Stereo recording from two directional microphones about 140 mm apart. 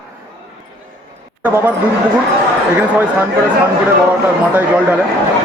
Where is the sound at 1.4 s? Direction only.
15° right (ahead or behind).